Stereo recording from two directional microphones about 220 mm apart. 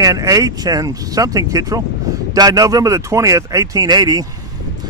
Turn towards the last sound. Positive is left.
turn(degrees=-20)  # may be behind; listen again after turning